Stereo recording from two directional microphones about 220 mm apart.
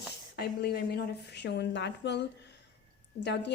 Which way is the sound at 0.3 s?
45° left (ahead or behind).